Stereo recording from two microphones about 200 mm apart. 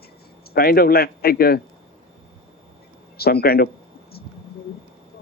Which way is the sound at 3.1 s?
50° left (ahead or behind).